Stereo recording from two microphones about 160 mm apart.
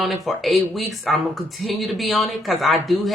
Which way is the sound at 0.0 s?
Centre (ahead or behind).